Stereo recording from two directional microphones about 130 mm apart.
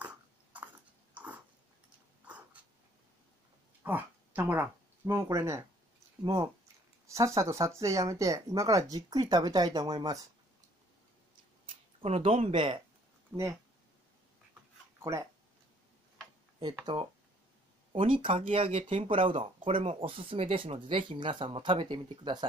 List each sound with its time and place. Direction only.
0.0 s biting: 10° right (ahead or behind)
1.1 s dog: 10° right (ahead or behind)
3.8 s speech: 15° right (ahead or behind); by 10.2 s 30° right (ahead or behind)
11.7 s speech: 50° right (ahead or behind)
13.3 s speech: 20° right (ahead or behind)
16.8 s speech: 40° right (ahead or behind)